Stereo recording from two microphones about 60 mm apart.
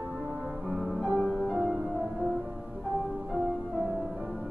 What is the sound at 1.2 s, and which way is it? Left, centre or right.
Music, centre.